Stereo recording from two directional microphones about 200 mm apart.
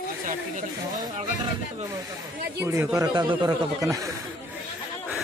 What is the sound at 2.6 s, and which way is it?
Speech, 15° right (ahead or behind).